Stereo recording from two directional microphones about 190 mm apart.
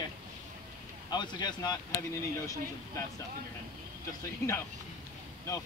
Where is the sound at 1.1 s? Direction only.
20° left (ahead or behind).